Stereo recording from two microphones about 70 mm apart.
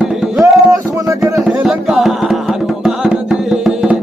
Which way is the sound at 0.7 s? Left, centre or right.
Right.